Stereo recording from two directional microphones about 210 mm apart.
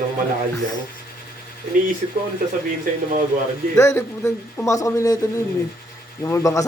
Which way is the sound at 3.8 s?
15° left (ahead or behind).